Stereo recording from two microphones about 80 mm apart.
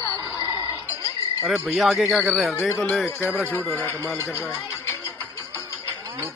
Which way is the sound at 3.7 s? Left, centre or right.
Left.